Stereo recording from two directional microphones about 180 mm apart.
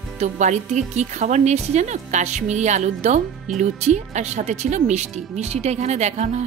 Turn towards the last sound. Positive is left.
turn(degrees=-40)  # may be behind; listen again after turning